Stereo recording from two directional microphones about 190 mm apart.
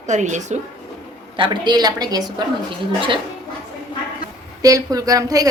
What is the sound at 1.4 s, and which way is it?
Speech, 20° right (ahead or behind).